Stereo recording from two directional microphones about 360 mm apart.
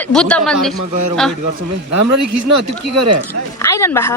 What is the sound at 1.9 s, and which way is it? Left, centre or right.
Speech, right.